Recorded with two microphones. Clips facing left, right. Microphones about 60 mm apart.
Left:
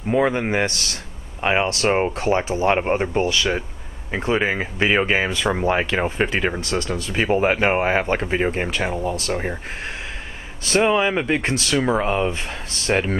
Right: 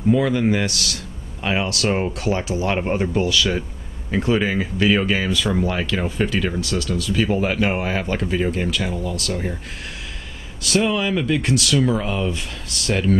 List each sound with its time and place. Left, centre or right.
0.1 s speech: left
10.6 s speech: left